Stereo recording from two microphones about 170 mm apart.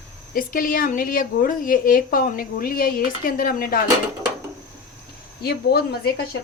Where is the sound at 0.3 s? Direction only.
55° left (ahead or behind).